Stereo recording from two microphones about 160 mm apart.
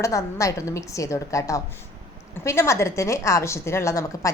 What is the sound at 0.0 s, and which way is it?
A woman's voice, 20° left (ahead or behind).